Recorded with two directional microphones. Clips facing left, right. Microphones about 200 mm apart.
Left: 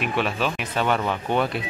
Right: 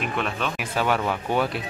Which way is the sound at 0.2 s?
Centre (ahead or behind).